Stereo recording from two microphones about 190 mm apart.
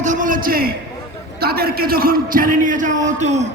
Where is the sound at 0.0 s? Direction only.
40° right (ahead or behind).